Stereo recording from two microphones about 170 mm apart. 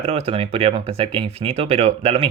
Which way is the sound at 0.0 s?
35° right (ahead or behind).